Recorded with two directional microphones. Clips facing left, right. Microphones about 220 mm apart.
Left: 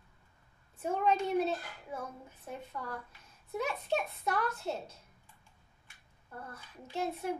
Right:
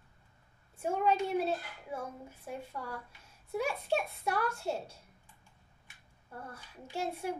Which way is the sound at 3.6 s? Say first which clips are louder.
Right 1 dB; 10° right (ahead or behind).